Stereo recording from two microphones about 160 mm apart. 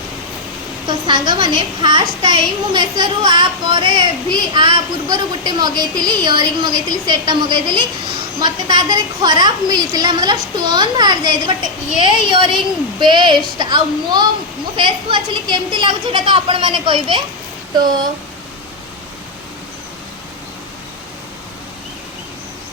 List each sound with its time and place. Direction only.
0.9 s a woman's voice: 30° right (ahead or behind)